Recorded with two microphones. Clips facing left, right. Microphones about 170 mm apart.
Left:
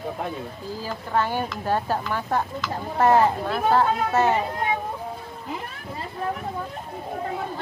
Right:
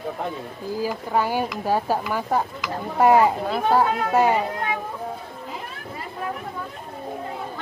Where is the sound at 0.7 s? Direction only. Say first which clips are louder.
Right 2 dB; 10° right (ahead or behind).